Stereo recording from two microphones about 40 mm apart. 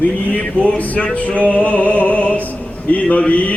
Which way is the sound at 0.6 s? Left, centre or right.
Left.